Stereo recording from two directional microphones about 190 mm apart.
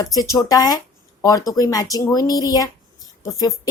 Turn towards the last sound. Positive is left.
turn(degrees=20)  # may be behind; listen again after turning